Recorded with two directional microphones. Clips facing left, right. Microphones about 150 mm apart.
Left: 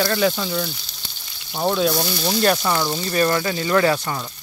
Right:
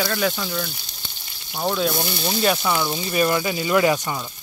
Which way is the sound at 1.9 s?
15° right (ahead or behind).